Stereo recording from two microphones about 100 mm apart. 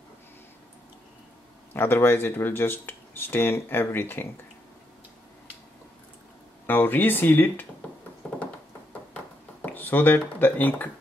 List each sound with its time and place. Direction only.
1.7 s speech: 25° left (ahead or behind)
6.6 s speech: 20° left (ahead or behind)
8.2 s a sound: 10° left (ahead or behind)